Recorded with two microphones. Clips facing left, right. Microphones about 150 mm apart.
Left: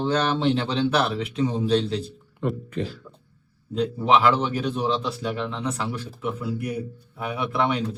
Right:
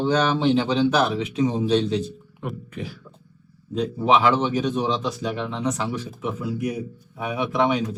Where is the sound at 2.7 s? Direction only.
10° right (ahead or behind).